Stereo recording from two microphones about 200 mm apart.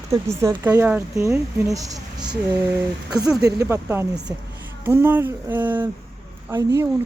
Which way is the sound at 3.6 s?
10° right (ahead or behind).